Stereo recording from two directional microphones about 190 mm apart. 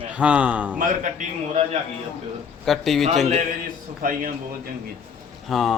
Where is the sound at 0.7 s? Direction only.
45° right (ahead or behind).